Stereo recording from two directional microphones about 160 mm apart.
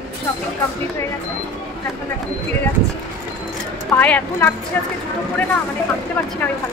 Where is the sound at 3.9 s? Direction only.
10° left (ahead or behind).